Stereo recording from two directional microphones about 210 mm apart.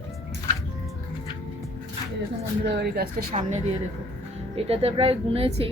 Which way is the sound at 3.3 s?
35° right (ahead or behind).